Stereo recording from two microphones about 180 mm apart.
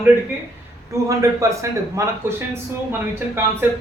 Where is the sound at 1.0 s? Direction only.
15° right (ahead or behind).